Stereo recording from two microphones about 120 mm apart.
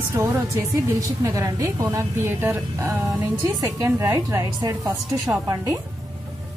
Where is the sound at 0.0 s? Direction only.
25° right (ahead or behind).